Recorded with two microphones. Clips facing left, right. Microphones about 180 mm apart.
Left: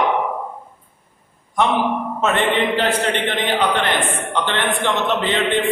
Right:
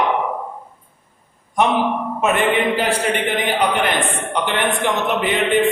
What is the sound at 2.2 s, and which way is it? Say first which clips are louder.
A man's voice: right 1 dB; 10° right (ahead or behind).